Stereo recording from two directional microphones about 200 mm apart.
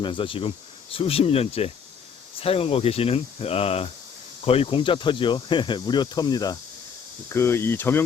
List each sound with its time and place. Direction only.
0.0 s speech: 25° left (ahead or behind)